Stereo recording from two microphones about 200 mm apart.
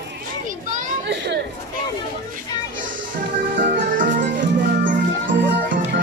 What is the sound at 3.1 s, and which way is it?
Music, 40° right (ahead or behind).